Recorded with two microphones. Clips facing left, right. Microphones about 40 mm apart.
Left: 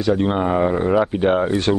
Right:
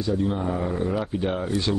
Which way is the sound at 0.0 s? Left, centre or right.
Left.